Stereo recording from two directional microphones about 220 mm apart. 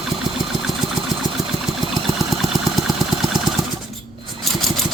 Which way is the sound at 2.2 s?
Centre (ahead or behind).